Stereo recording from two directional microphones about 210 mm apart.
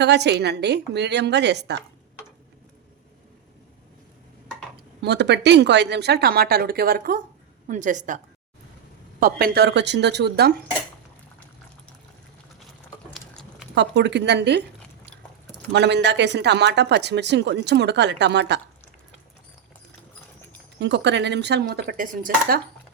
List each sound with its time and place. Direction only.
0.0 s speech: 55° right (ahead or behind)
5.0 s a woman's voice: 55° right (ahead or behind); by 8.2 s 35° right (ahead or behind)
9.2 s speech: 50° right (ahead or behind)
13.1 s a sound: centre (ahead or behind)
13.7 s speech: 55° right (ahead or behind)
15.7 s speech: 55° right (ahead or behind)
20.7 s speech: 55° right (ahead or behind)